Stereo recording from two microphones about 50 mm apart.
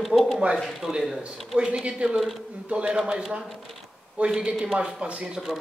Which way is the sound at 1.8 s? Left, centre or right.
Centre.